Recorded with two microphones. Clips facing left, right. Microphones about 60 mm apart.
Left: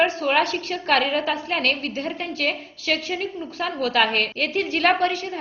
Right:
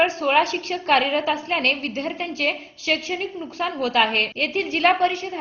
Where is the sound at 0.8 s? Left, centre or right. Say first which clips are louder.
Right 1 dB; right.